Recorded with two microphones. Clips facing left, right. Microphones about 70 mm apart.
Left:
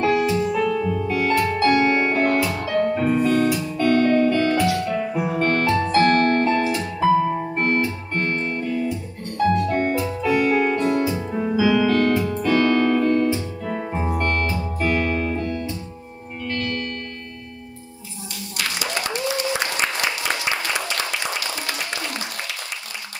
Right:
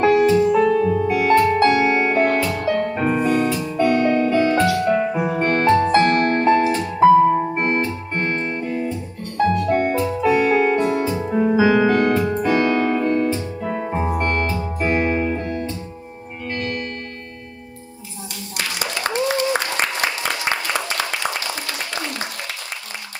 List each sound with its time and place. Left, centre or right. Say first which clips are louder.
0.0 s music: right 5 dB; right
1.0 s music: right 4 dB; right
3.2 s music: even; right
7.5 s music: right 1 dB; right
11.4 s music: right 3 dB; right
11.9 s music: right 2 dB; right
19.0 s applause: right 7 dB; right